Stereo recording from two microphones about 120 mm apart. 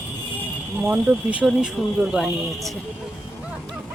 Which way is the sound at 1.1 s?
10° right (ahead or behind).